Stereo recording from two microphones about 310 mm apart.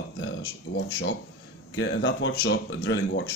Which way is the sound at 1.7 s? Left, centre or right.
Left.